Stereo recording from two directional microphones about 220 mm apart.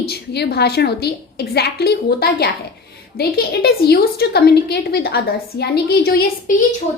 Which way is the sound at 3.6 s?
45° left (ahead or behind).